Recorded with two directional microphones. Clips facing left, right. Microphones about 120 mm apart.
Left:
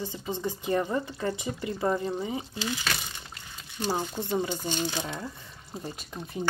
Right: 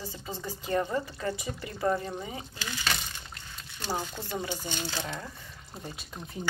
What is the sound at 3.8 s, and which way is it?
Speech, 20° left (ahead or behind).